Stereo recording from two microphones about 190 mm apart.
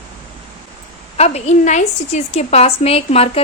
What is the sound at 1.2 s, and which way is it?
A woman's voice, 35° left (ahead or behind).